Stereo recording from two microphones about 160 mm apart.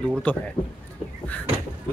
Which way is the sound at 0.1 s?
10° left (ahead or behind).